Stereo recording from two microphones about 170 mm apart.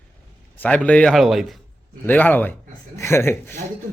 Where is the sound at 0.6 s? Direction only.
10° left (ahead or behind).